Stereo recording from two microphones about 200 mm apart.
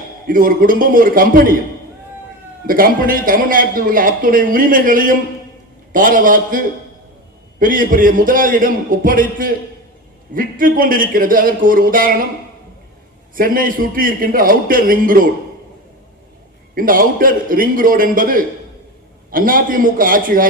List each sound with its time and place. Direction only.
0.3 s a man's voice: 45° right (ahead or behind)
2.6 s a man's voice: 45° right (ahead or behind)
13.3 s a man's voice: 45° right (ahead or behind)
16.7 s a man's voice: 45° right (ahead or behind)